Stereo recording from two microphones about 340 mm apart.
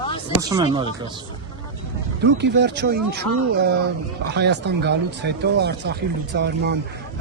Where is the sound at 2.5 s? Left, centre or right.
Right.